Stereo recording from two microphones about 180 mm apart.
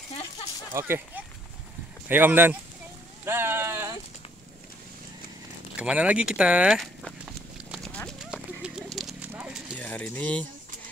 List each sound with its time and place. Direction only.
0.7 s speech: 10° right (ahead or behind)
5.8 s walk: 5° right (ahead or behind)
9.8 s speech: 10° left (ahead or behind)